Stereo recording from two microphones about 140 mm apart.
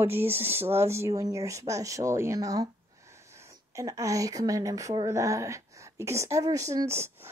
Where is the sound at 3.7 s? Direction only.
20° right (ahead or behind).